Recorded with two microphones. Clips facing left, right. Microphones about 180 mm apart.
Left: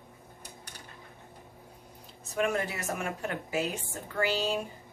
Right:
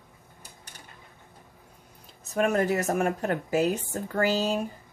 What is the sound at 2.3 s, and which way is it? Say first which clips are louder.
Speech: right 6 dB; 40° right (ahead or behind).